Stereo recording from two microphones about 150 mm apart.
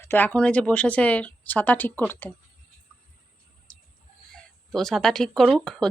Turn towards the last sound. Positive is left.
turn(degrees=5)  # may be behind; listen again after turning